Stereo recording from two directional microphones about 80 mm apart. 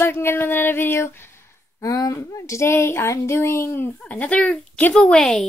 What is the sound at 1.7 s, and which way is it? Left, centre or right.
Speech, left.